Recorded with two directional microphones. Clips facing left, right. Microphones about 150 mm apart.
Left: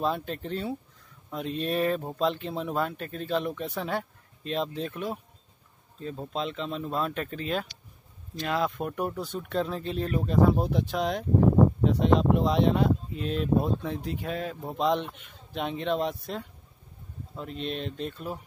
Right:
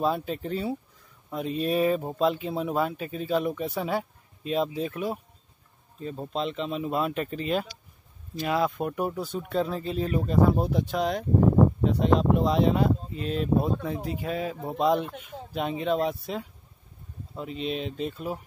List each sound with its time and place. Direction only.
0.0 s speech: 5° right (ahead or behind)